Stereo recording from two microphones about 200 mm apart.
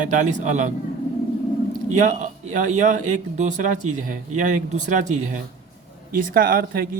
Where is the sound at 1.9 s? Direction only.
40° right (ahead or behind).